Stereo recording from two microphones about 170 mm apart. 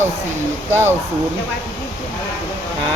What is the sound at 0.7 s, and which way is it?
Speech, 15° right (ahead or behind).